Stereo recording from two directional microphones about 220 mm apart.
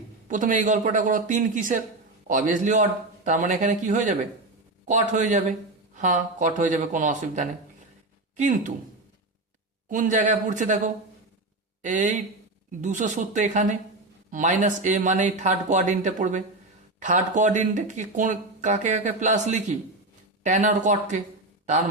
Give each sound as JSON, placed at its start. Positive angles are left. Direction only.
{"t": 0.3, "sound": "speech", "side_deg": -35}
{"t": 9.9, "sound": "speech", "side_deg": -35}